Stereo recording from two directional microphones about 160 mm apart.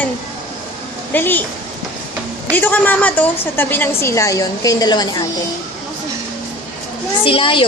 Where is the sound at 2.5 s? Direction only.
10° left (ahead or behind).